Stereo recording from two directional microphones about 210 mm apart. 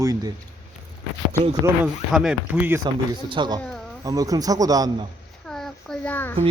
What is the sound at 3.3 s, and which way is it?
Speech, 20° right (ahead or behind).